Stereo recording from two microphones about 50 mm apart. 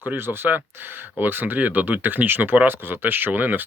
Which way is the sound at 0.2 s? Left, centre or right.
Right.